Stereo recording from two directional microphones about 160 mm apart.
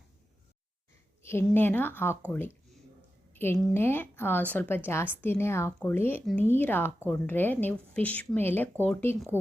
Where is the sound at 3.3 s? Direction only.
15° left (ahead or behind).